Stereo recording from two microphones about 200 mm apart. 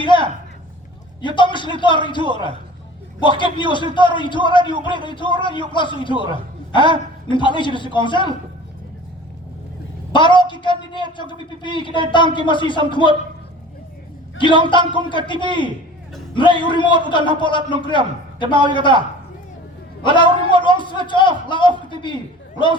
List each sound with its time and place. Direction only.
0.0 s a sound: 25° left (ahead or behind)
1.4 s a man's voice: 25° left (ahead or behind)
10.1 s a woman's voice: 25° left (ahead or behind)
14.4 s a man's voice: 25° right (ahead or behind)
14.7 s a man's voice: 25° left (ahead or behind)
20.1 s a man's voice: 25° left (ahead or behind)